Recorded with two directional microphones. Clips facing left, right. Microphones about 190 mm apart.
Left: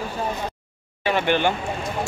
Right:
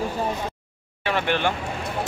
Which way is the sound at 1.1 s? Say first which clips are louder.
Left 3 dB; centre (ahead or behind).